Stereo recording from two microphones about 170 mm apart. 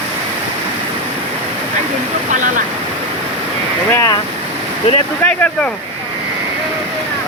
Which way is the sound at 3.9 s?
15° left (ahead or behind).